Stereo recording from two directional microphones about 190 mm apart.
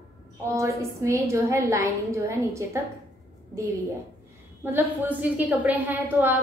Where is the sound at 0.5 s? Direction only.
15° right (ahead or behind).